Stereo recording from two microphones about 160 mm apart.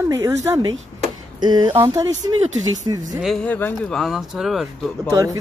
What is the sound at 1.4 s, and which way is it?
Speech, 25° right (ahead or behind).